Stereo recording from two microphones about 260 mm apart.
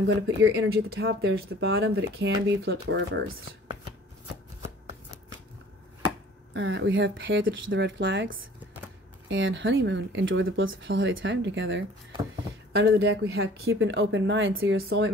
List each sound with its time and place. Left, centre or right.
0.4 s speech: right
6.5 s speech: right
13.3 s speech: right